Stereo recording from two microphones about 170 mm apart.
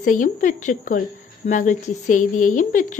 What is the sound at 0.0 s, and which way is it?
Speech, 50° left (ahead or behind).